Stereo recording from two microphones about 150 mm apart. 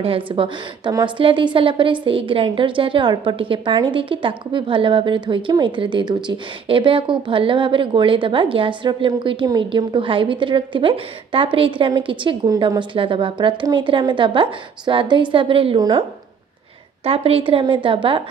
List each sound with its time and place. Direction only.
0.0 s a woman's voice: 35° right (ahead or behind)